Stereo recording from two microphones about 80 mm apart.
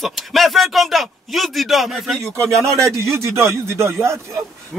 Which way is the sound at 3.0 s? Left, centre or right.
Right.